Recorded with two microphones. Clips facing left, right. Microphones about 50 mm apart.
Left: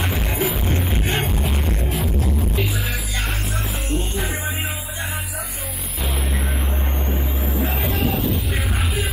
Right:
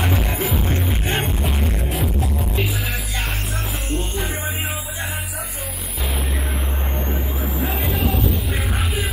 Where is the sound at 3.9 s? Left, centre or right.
Centre.